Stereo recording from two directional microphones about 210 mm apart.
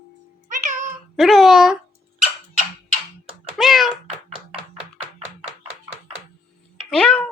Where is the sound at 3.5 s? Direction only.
Centre (ahead or behind).